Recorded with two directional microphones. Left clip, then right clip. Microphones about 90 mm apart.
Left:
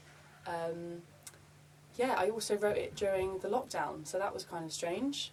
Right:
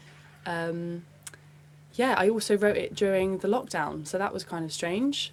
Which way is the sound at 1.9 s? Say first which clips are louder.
Right 8 dB; 35° right (ahead or behind).